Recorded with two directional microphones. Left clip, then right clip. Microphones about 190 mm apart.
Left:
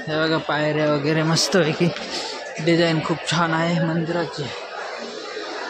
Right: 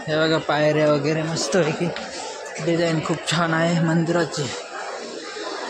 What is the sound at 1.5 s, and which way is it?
Speech, 20° left (ahead or behind).